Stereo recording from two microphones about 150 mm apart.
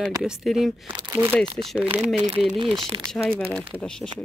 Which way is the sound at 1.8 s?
10° right (ahead or behind).